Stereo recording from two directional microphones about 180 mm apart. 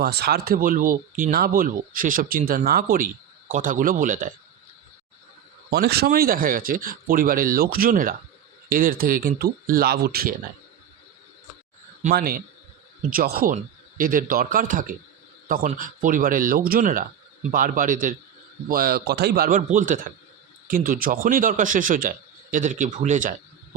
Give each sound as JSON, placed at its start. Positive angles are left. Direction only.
{"t": 0.0, "sound": "a man's voice", "side_deg": -65}
{"t": 5.7, "sound": "a man's voice", "side_deg": -60}
{"t": 12.1, "sound": "a man's voice", "side_deg": -55}